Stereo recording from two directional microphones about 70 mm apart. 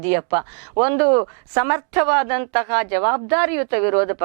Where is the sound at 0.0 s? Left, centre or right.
Centre.